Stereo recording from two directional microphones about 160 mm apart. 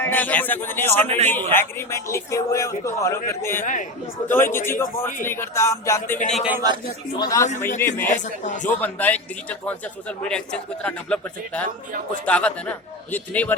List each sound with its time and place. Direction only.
0.0 s a man's voice: 10° left (ahead or behind)
3.6 s speech: 55° left (ahead or behind)
4.3 s a man's voice: 15° left (ahead or behind)
6.3 s speech: 5° right (ahead or behind)
7.2 s a man's voice: 20° left (ahead or behind)
8.1 s speech: 50° left (ahead or behind)
8.8 s a man's voice: 10° left (ahead or behind)